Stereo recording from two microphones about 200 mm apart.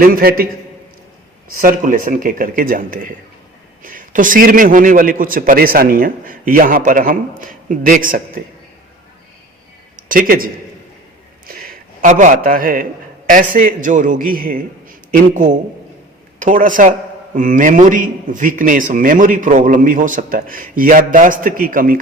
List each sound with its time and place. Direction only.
0.0 s a man's voice: 50° right (ahead or behind)
1.5 s a man's voice: 45° right (ahead or behind)
10.1 s a man's voice: 45° right (ahead or behind)
12.0 s a man's voice: 40° right (ahead or behind)